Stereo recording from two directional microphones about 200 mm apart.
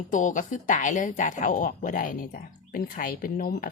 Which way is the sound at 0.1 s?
40° left (ahead or behind).